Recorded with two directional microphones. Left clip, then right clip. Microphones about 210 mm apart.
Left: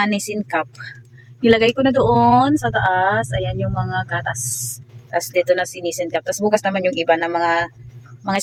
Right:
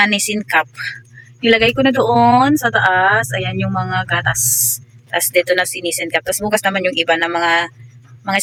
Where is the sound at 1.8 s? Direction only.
10° right (ahead or behind).